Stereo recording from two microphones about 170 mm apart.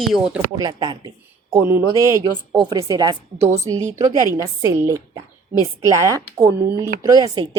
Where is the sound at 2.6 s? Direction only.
25° right (ahead or behind).